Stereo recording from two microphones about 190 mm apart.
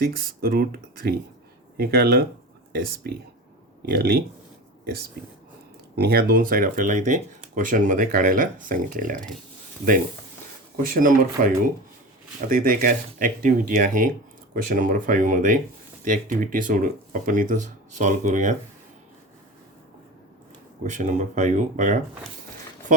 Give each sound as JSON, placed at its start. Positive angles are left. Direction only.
{"t": 0.0, "sound": "speech", "side_deg": -50}
{"t": 6.0, "sound": "speech", "side_deg": -55}
{"t": 10.8, "sound": "speech", "side_deg": -45}
{"t": 12.5, "sound": "speech", "side_deg": -50}
{"t": 20.8, "sound": "speech", "side_deg": -40}